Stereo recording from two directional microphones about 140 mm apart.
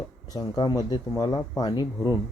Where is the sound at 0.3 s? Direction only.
25° left (ahead or behind).